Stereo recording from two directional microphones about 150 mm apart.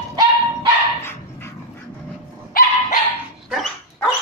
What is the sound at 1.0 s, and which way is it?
Dog, 15° left (ahead or behind).